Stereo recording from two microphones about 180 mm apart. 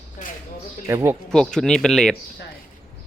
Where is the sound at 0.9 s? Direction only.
15° right (ahead or behind).